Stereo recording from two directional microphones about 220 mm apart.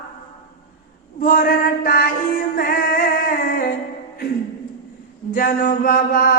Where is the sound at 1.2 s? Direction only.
40° left (ahead or behind).